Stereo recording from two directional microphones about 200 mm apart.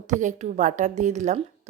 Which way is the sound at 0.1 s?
35° right (ahead or behind).